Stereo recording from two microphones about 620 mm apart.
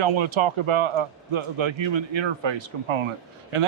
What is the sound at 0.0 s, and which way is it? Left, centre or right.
Speech, right.